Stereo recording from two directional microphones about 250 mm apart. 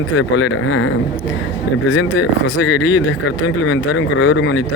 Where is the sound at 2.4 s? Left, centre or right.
Left.